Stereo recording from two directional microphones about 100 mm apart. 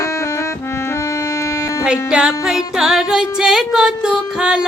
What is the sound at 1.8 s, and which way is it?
Music, 10° right (ahead or behind).